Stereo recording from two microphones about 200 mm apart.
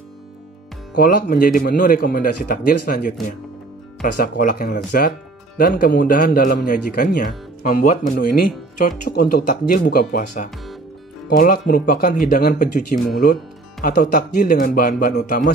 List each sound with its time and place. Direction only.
0.9 s speech: 45° left (ahead or behind)